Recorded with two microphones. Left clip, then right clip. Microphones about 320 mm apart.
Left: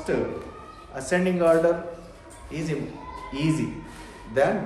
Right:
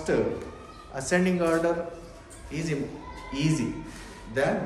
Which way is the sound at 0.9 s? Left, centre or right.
Centre.